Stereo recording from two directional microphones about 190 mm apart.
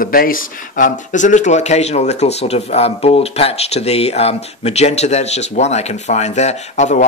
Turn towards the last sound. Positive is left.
turn(degrees=40)  # may be behind; listen again after turning